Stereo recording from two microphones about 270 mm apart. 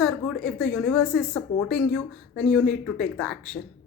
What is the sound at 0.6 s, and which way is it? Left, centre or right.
Speech, centre.